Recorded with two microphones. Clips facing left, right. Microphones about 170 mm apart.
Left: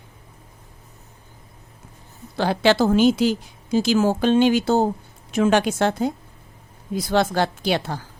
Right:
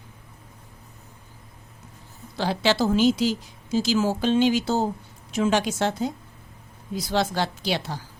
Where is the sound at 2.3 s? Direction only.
55° left (ahead or behind).